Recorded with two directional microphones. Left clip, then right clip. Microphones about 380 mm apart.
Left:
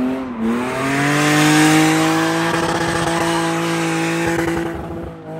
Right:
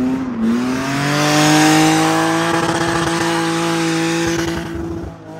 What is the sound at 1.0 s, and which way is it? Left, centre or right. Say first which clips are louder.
Vehicle: right 1 dB; centre.